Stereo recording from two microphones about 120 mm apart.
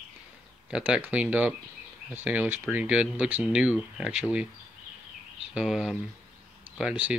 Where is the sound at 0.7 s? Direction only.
10° right (ahead or behind).